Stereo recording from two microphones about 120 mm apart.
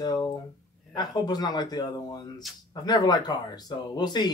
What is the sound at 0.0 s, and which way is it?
Speech, 30° left (ahead or behind).